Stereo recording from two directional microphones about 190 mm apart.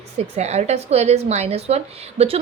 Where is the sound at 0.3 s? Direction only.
35° right (ahead or behind).